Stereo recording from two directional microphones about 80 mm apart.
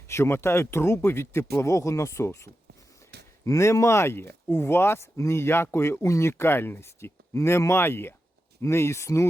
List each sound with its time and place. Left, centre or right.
0.1 s speech: left